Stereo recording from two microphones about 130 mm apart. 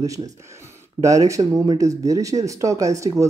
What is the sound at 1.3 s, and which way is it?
Speech, 25° right (ahead or behind).